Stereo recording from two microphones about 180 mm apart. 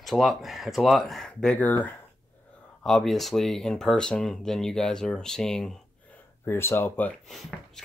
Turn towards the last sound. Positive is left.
turn(degrees=0)  # may be behind; listen again after turning